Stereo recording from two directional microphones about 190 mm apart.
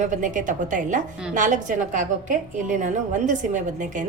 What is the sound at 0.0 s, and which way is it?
A woman's voice, 45° right (ahead or behind).